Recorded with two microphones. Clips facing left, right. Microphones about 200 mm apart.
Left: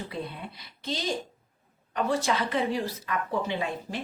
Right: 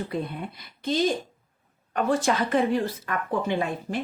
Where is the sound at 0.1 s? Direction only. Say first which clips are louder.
Right 5 dB; 50° right (ahead or behind).